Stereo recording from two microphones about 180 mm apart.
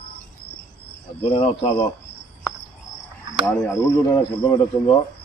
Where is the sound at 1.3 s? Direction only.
30° left (ahead or behind).